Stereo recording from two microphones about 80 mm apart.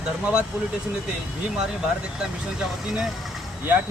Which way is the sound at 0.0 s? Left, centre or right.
Centre.